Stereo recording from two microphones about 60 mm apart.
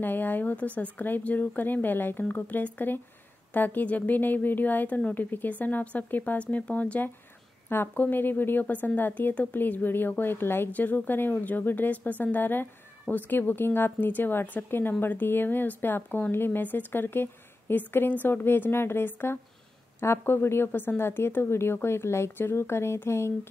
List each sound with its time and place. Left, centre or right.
0.0 s speech: left